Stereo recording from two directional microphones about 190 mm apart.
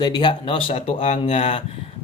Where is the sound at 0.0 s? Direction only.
25° left (ahead or behind).